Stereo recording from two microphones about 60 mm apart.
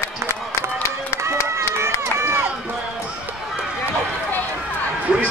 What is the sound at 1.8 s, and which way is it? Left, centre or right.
Run, right.